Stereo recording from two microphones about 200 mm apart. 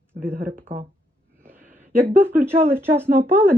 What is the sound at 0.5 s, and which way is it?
Speech, 40° right (ahead or behind).